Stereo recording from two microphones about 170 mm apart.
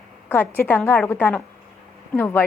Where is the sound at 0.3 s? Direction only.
10° left (ahead or behind).